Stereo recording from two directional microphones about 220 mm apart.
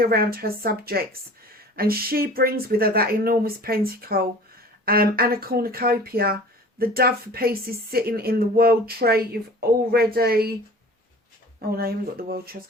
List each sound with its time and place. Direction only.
0.0 s speech: 45° right (ahead or behind)
11.7 s speech: 45° right (ahead or behind)